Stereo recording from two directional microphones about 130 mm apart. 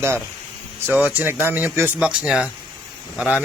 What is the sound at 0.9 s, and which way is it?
Speech, 10° right (ahead or behind).